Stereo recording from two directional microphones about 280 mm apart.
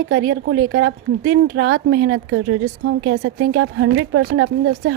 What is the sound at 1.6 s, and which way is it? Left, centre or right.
A woman's voice, right.